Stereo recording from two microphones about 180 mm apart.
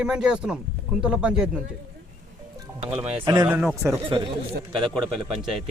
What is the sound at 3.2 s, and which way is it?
Speech, 20° right (ahead or behind).